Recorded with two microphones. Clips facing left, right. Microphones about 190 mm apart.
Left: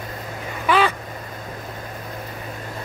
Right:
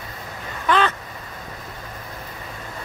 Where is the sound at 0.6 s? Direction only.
10° left (ahead or behind).